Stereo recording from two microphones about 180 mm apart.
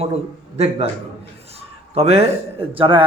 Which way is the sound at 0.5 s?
35° right (ahead or behind).